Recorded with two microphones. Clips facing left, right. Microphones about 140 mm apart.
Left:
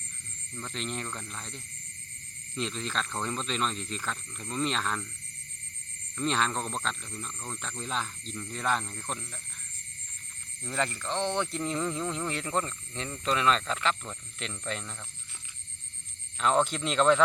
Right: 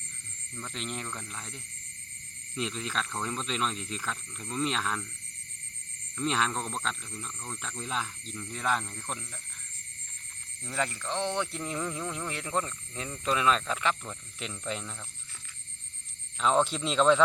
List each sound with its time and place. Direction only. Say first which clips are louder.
0.7 s speech: left 2 dB; 5° right (ahead or behind)
6.1 s speech: left 1 dB; 5° right (ahead or behind)
10.6 s speech: left 1 dB; 5° right (ahead or behind)
16.4 s speech: even; centre (ahead or behind)